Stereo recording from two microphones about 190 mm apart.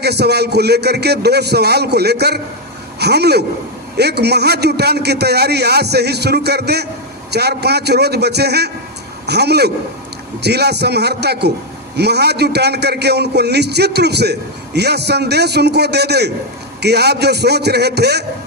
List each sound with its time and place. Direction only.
0.0 s a man's voice: 60° right (ahead or behind)